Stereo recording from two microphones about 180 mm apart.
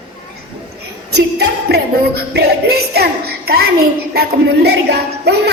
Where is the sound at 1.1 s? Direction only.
65° right (ahead or behind).